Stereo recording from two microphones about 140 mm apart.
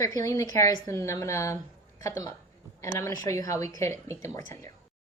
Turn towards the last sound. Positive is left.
turn(degrees=20)  # may be behind; listen again after turning